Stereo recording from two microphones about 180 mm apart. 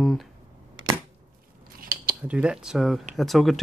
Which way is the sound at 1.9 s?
55° right (ahead or behind).